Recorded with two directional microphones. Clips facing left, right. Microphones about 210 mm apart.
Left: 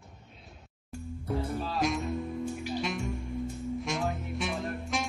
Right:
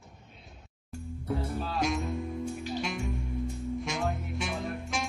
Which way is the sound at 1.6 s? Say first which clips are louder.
Even; centre (ahead or behind).